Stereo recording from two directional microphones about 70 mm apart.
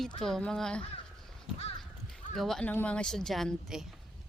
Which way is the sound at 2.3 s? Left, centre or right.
Centre.